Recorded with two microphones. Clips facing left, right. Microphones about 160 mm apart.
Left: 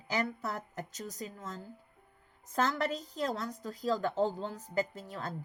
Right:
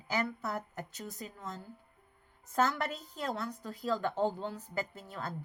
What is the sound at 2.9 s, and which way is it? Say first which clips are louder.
Speech: left 3 dB; 40° left (ahead or behind).